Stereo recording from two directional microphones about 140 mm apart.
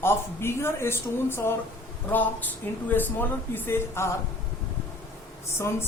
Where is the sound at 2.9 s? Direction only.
15° left (ahead or behind).